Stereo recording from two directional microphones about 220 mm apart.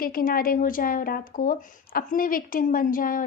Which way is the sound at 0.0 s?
40° left (ahead or behind).